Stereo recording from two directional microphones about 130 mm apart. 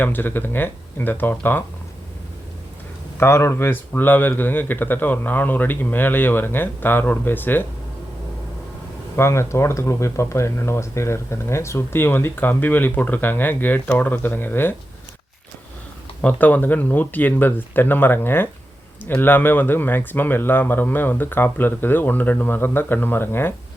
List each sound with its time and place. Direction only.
0.0 s speech: 15° left (ahead or behind)
3.2 s speech: 20° left (ahead or behind)
9.1 s speech: 20° left (ahead or behind)
16.2 s speech: 10° left (ahead or behind)